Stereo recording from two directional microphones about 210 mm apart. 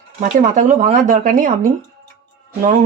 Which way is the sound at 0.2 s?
35° right (ahead or behind).